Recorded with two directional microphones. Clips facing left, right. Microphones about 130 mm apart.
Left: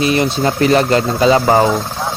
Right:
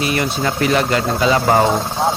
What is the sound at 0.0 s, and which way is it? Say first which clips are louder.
Speech: left 4 dB; 25° left (ahead or behind).